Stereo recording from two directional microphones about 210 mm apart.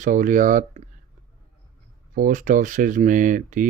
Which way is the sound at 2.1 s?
40° right (ahead or behind).